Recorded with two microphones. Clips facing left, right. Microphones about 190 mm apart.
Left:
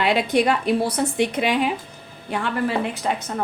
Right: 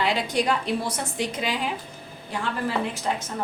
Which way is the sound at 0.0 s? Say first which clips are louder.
Left 5 dB; 65° left (ahead or behind).